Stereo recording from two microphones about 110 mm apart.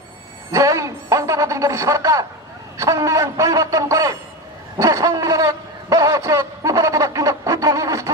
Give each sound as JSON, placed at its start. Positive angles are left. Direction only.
{"t": 0.5, "sound": "speech", "side_deg": -30}